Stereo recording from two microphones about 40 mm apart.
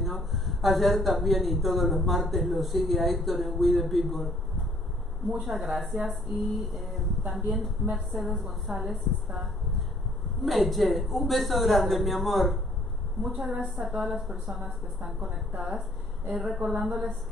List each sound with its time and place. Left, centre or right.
0.0 s speech: centre
5.3 s speech: centre
9.3 s a sound: centre
10.4 s speech: centre
13.5 s a woman's voice: centre
13.8 s speech: centre
16.3 s speech: centre